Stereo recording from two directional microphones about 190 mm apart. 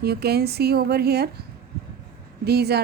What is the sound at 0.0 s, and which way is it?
A woman's voice, 55° right (ahead or behind).